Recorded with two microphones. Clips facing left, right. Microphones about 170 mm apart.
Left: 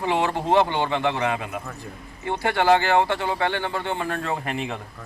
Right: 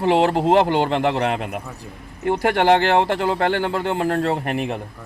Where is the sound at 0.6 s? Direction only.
60° right (ahead or behind).